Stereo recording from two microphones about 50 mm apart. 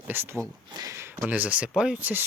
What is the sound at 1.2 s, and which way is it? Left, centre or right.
Speech, right.